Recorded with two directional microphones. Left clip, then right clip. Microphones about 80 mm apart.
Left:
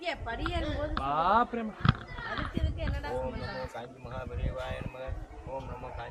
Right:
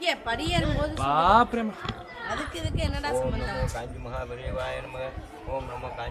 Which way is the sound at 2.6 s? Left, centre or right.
Right.